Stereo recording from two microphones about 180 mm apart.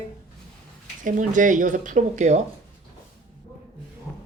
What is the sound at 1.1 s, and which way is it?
A woman's voice, 45° right (ahead or behind).